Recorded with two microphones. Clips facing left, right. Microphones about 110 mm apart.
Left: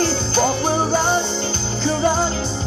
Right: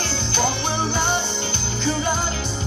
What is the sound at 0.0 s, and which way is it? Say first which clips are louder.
Music: left 5 dB; 40° left (ahead or behind).